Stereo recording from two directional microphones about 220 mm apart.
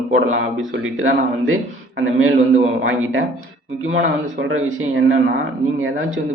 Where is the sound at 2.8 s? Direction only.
65° right (ahead or behind).